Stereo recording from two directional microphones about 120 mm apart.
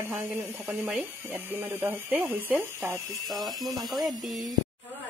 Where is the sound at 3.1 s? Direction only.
Centre (ahead or behind).